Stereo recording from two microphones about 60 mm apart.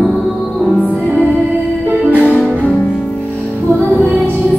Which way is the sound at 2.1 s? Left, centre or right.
Right.